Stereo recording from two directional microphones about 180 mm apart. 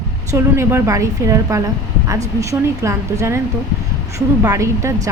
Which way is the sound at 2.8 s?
15° right (ahead or behind).